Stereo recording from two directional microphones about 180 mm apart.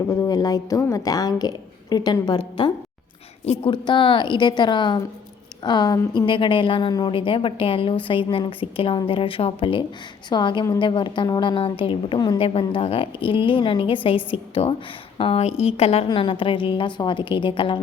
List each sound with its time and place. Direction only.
0.1 s a woman's voice: 20° left (ahead or behind)
3.4 s a woman's voice: 30° left (ahead or behind)